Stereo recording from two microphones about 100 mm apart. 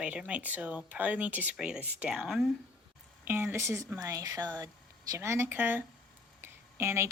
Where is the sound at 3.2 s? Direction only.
20° right (ahead or behind); by 4.7 s 40° right (ahead or behind).